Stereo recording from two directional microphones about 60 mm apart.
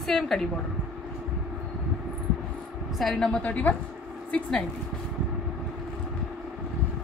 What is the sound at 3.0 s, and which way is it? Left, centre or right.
Speech, centre.